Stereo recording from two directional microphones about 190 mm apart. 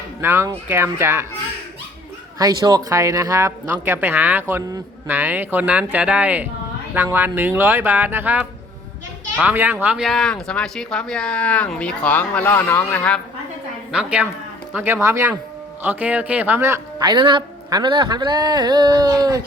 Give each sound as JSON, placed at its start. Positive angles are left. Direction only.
{"t": 0.2, "sound": "speech", "side_deg": -15}
{"t": 2.4, "sound": "speech", "side_deg": -20}
{"t": 13.9, "sound": "speech", "side_deg": -5}